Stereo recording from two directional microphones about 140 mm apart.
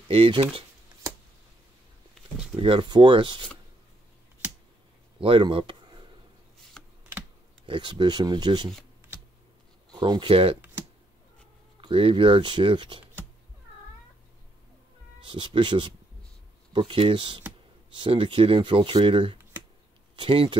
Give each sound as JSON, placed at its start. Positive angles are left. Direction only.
{"t": 0.1, "sound": "speech", "side_deg": -40}
{"t": 2.5, "sound": "speech", "side_deg": -40}
{"t": 5.2, "sound": "speech", "side_deg": -40}
{"t": 6.8, "sound": "computer keyboard", "side_deg": 5}
{"t": 7.6, "sound": "speech", "side_deg": -35}
{"t": 9.9, "sound": "speech", "side_deg": -35}
{"t": 11.8, "sound": "speech", "side_deg": -40}
{"t": 15.2, "sound": "speech", "side_deg": -35}